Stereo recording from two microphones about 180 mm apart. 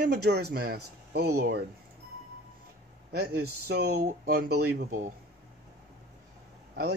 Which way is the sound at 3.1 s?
60° right (ahead or behind).